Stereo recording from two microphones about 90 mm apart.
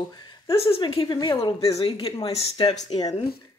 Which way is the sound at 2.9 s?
90° left.